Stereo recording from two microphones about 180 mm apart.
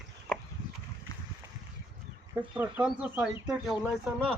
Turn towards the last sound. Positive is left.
turn(degrees=-5)  # may be behind; listen again after turning